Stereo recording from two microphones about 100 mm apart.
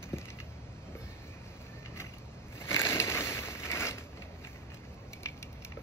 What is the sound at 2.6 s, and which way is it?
Scrape, 25° left (ahead or behind).